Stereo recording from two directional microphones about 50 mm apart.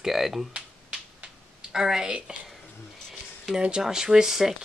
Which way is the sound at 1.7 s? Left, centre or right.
Centre.